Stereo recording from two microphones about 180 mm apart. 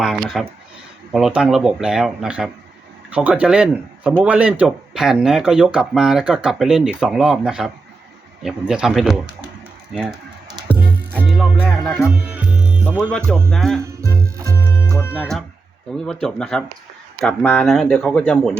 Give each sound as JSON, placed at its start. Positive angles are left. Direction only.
{"t": 0.0, "sound": "a sound", "side_deg": 0}
{"t": 1.1, "sound": "speech", "side_deg": -5}
{"t": 10.8, "sound": "music", "side_deg": 5}
{"t": 11.5, "sound": "speech", "side_deg": 5}
{"t": 12.0, "sound": "music", "side_deg": -5}
{"t": 13.0, "sound": "speech", "side_deg": 5}
{"t": 14.0, "sound": "music", "side_deg": -15}
{"t": 14.5, "sound": "music", "side_deg": 15}
{"t": 16.2, "sound": "speech", "side_deg": 5}